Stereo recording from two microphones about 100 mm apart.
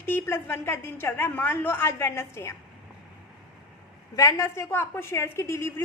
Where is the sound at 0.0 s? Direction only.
20° left (ahead or behind).